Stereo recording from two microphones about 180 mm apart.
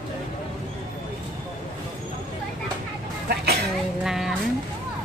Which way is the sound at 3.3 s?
60° right (ahead or behind).